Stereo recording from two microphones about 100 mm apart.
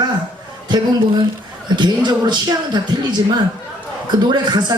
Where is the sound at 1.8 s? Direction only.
45° right (ahead or behind).